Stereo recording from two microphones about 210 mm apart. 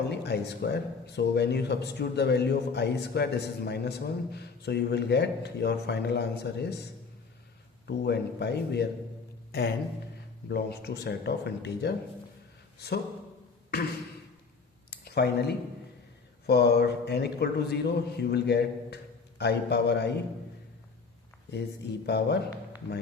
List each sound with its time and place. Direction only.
0.1 s speech: 55° left (ahead or behind)
7.9 s speech: 55° left (ahead or behind)
9.5 s a sound: 50° left (ahead or behind)
10.5 s speech: 50° left (ahead or behind)
14.8 s a sound: 50° left (ahead or behind)
16.5 s speech: 50° left (ahead or behind)
22.0 s speech: 50° left (ahead or behind)